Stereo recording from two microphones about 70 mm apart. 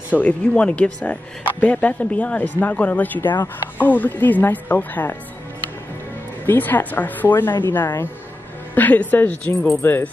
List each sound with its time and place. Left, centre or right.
0.1 s speech: centre
6.4 s a woman's voice: left